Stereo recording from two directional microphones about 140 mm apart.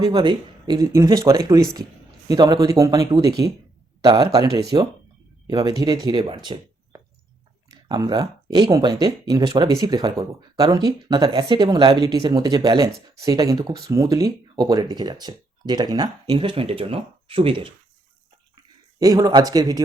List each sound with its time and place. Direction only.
0.0 s speech: 30° right (ahead or behind)
18.9 s speech: 25° right (ahead or behind)